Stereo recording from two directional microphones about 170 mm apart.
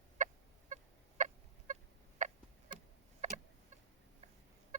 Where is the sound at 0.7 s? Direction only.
50° right (ahead or behind).